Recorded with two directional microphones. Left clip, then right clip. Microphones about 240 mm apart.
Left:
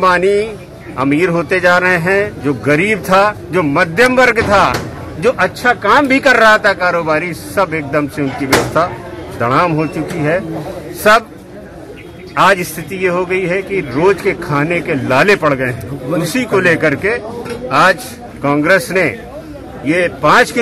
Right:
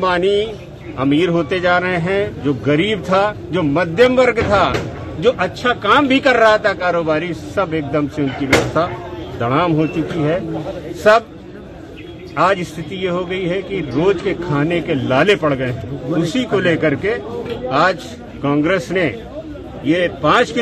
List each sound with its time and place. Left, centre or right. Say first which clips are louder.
0.0 s a man's voice: left 4 dB; centre
9.4 s a man's voice: left 3 dB; centre
13.0 s a man's voice: left 6 dB; centre